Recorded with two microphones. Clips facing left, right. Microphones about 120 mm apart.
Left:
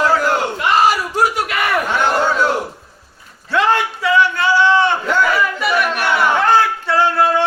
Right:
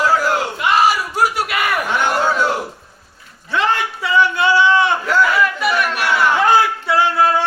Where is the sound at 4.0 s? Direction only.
15° right (ahead or behind).